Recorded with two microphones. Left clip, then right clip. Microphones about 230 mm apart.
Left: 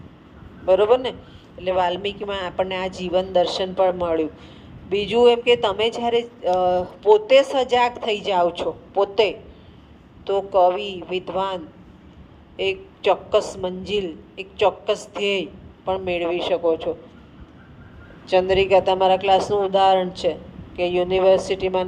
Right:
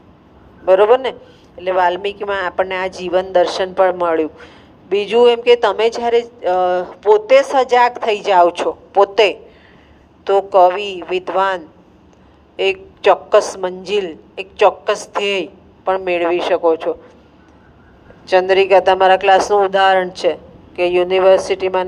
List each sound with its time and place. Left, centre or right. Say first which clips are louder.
0.6 s a woman's voice: right 6 dB; right
18.3 s a woman's voice: right 5 dB; right